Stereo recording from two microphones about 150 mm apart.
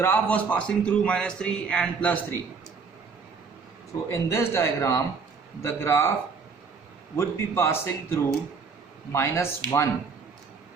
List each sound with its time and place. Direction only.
0.0 s a man's voice: 10° left (ahead or behind)
4.1 s a man's voice: 20° left (ahead or behind)
7.2 s a man's voice: 15° left (ahead or behind)